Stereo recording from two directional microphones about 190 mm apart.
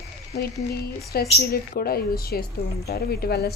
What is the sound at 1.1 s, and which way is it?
A woman's voice, 55° left (ahead or behind).